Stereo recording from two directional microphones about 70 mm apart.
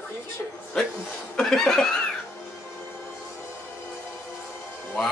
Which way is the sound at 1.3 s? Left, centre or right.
Centre.